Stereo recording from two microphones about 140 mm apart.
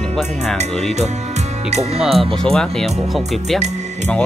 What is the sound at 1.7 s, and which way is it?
Speech, 50° right (ahead or behind).